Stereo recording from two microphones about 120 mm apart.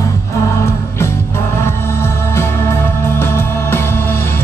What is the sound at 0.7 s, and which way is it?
Music, 25° left (ahead or behind).